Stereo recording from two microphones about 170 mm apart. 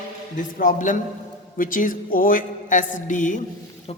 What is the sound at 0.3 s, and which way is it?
Speech, 50° left (ahead or behind).